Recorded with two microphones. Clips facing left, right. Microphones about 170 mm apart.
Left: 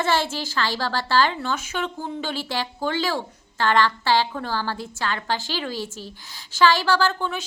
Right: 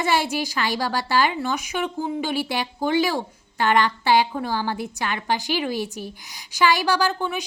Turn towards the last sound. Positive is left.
turn(degrees=-15)  # may be behind; listen again after turning